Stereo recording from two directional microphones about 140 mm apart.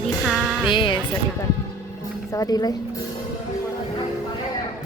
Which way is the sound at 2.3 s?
25° left (ahead or behind).